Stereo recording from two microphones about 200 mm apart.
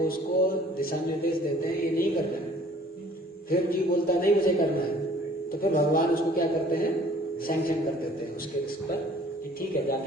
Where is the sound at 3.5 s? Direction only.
45° left (ahead or behind).